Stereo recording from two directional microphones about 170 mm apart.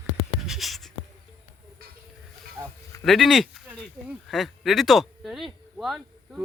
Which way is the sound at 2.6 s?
15° right (ahead or behind).